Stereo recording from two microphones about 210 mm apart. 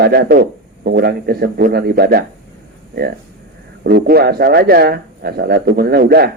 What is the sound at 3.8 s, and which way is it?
Speech, 45° right (ahead or behind).